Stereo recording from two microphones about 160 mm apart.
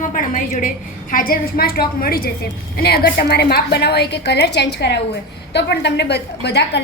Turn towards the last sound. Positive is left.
turn(degrees=90)